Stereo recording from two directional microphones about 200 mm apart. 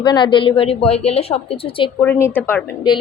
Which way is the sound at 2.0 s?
10° left (ahead or behind).